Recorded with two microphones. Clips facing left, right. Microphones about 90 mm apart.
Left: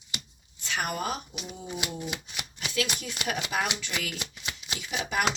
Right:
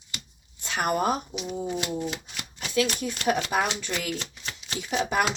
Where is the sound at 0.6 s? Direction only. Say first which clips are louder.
Right 6 dB; 40° right (ahead or behind).